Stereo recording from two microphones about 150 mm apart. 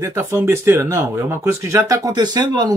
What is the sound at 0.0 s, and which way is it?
Speech, 20° right (ahead or behind).